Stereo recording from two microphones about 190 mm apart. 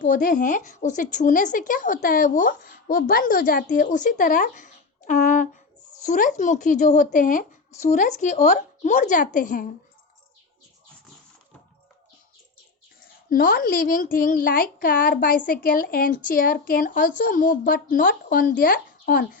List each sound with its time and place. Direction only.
0.0 s speech: 45° left (ahead or behind)
13.3 s speech: 50° left (ahead or behind)